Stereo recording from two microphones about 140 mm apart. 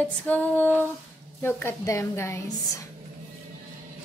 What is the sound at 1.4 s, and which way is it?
Speech, 15° left (ahead or behind).